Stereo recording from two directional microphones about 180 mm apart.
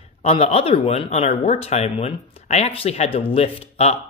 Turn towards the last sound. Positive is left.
turn(degrees=35)  # may be behind; listen again after turning